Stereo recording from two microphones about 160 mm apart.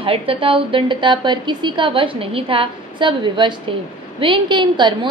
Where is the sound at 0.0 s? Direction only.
35° right (ahead or behind).